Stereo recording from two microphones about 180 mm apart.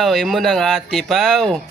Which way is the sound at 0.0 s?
Centre (ahead or behind).